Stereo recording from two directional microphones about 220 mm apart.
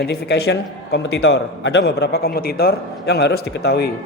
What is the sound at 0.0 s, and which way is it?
A man's voice, 45° left (ahead or behind).